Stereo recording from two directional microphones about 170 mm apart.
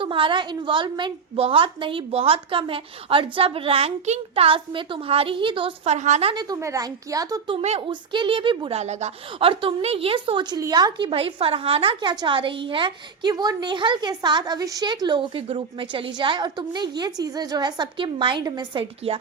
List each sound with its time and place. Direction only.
0.0 s a woman's voice: 30° right (ahead or behind)
6.3 s a woman's voice: 25° right (ahead or behind)
7.5 s a woman's voice: 35° right (ahead or behind)
8.8 s a woman's voice: 40° right (ahead or behind)